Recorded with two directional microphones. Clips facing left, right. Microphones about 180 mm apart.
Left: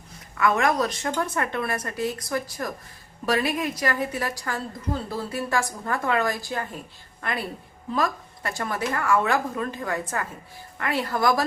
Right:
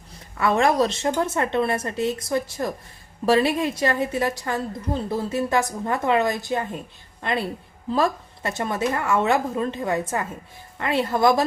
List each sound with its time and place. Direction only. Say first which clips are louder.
0.3 s a woman's voice: right 3 dB; 30° right (ahead or behind)